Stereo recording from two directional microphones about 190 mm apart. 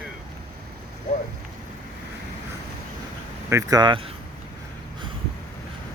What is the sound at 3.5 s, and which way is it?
Speech, 20° right (ahead or behind).